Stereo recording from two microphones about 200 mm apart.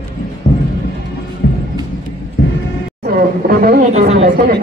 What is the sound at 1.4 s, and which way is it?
Music, 60° left (ahead or behind).